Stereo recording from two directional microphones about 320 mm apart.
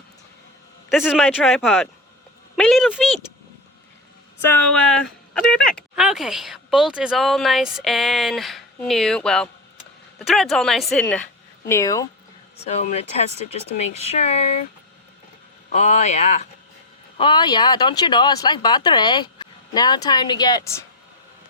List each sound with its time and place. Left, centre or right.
0.9 s speech: centre
4.4 s speech: centre
12.5 s speech: left
15.7 s speech: left